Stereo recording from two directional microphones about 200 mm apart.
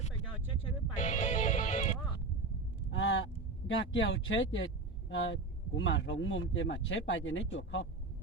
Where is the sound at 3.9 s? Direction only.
70° left (ahead or behind).